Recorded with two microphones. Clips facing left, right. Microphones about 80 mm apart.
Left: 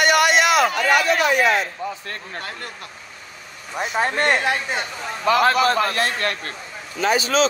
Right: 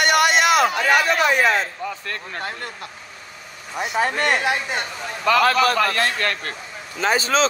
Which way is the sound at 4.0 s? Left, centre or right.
Left.